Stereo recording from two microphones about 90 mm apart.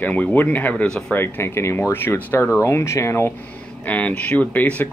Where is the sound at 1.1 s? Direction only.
25° left (ahead or behind).